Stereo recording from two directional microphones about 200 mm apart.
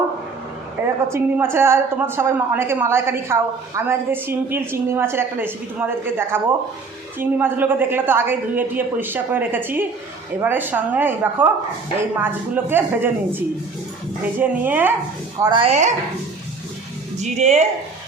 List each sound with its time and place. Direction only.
1.0 s a woman's voice: 15° right (ahead or behind)
15.4 s a woman's voice: 25° right (ahead or behind)
17.2 s speech: 35° right (ahead or behind)